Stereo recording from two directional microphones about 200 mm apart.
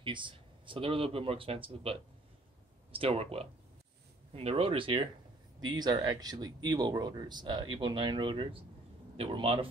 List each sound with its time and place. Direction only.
0.0 s speech: 25° right (ahead or behind)